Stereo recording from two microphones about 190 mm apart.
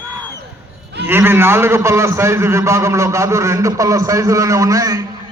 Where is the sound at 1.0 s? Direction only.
10° right (ahead or behind).